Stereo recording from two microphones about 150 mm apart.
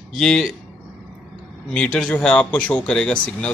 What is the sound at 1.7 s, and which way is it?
A man's voice, 5° left (ahead or behind).